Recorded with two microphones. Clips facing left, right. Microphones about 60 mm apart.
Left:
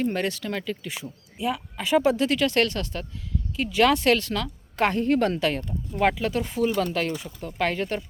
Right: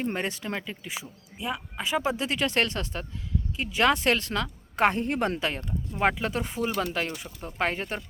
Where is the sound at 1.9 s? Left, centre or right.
Centre.